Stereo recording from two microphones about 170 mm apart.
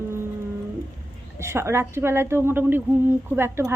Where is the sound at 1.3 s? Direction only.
15° right (ahead or behind).